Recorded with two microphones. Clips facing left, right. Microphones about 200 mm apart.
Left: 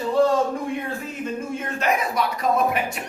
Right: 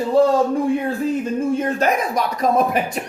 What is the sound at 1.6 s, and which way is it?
Speech, 40° right (ahead or behind).